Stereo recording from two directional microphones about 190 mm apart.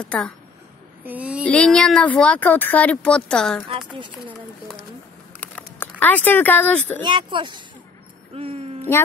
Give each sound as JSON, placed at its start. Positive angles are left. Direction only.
{"t": 0.0, "sound": "speech", "side_deg": 5}
{"t": 1.0, "sound": "speech", "side_deg": -5}
{"t": 1.4, "sound": "speech", "side_deg": 5}
{"t": 5.4, "sound": "a sound", "side_deg": 10}
{"t": 7.0, "sound": "speech", "side_deg": -25}
{"t": 8.4, "sound": "a sound", "side_deg": -30}